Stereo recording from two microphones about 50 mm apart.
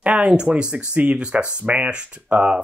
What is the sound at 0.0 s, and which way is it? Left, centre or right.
Speech, right.